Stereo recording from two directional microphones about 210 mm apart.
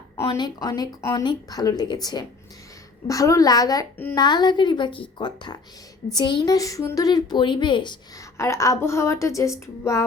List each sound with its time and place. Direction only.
0.2 s a woman's voice: 20° left (ahead or behind)